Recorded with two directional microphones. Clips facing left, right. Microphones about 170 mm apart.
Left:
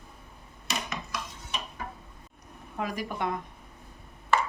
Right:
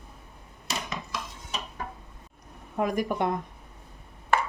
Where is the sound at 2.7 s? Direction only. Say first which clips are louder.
Right 6 dB; 50° right (ahead or behind).